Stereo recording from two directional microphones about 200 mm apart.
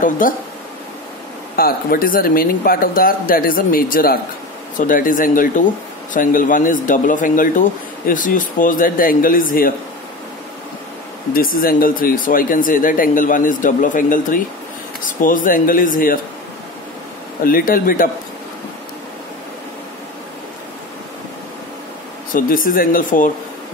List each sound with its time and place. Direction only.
0.2 s speech: 45° left (ahead or behind)
1.6 s speech: 45° left (ahead or behind)
11.3 s speech: 45° left (ahead or behind)
17.5 s speech: 45° left (ahead or behind)
22.3 s speech: 45° left (ahead or behind)